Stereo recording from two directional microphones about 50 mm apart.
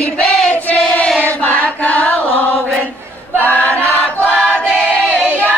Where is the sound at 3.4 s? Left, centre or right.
Left.